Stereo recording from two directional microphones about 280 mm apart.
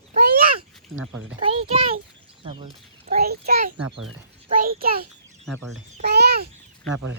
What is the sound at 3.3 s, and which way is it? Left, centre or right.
A child's voice, right.